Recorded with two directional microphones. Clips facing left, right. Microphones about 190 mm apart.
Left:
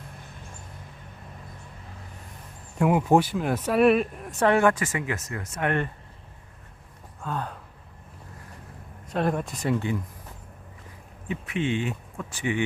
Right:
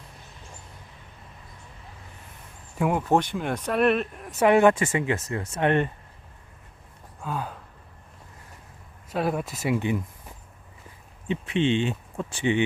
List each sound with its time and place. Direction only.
2.7 s speech: centre (ahead or behind)
4.4 s speech: 20° right (ahead or behind)
7.2 s speech: 5° right (ahead or behind)
9.0 s speech: 5° right (ahead or behind)
11.3 s speech: 25° right (ahead or behind)